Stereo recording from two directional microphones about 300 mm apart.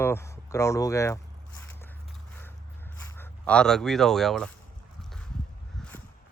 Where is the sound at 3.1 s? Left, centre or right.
Centre.